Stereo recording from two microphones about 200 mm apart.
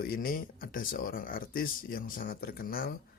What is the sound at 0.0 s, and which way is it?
Speech, 45° left (ahead or behind).